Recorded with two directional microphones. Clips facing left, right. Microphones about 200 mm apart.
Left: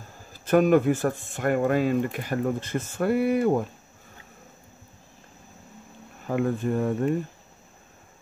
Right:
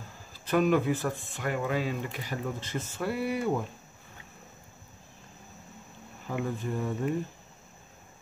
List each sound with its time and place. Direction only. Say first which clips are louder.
0.3 s speech: left 6 dB; 50° left (ahead or behind)
6.2 s speech: left 7 dB; 55° left (ahead or behind)